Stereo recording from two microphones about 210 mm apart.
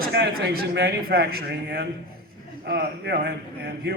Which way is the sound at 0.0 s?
50° right (ahead or behind).